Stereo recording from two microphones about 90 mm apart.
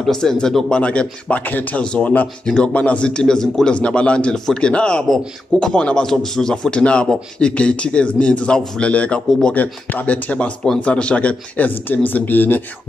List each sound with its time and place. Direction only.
0.0 s speech: 5° left (ahead or behind)